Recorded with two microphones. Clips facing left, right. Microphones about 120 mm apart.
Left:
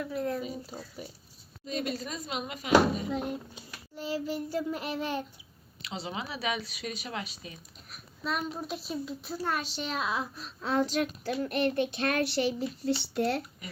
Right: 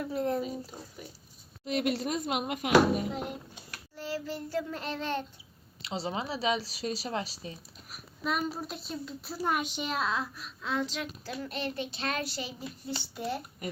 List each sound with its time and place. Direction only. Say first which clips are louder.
0.0 s speech: right 2 dB; 30° right (ahead or behind)
0.7 s child singing: left 3 dB; 10° left (ahead or behind)
1.6 s speech: right 4 dB; 65° right (ahead or behind)
3.9 s child singing: left 3 dB; 15° left (ahead or behind)
5.8 s speech: right 3 dB; 30° right (ahead or behind)
7.9 s a child's voice: right 1 dB; 5° right (ahead or behind)
9.4 s speech: right 3 dB; 15° right (ahead or behind)
10.3 s speech: left 4 dB; 35° left (ahead or behind); by 13.4 s 80° left